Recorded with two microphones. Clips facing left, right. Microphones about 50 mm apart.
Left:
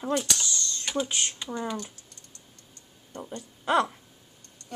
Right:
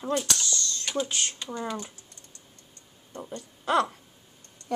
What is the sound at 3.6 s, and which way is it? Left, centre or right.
Speech, centre.